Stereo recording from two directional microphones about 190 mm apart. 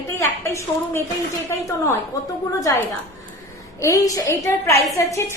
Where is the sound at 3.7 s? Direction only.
15° left (ahead or behind).